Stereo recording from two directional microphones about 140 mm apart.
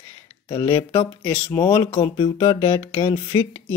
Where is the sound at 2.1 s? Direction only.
40° left (ahead or behind).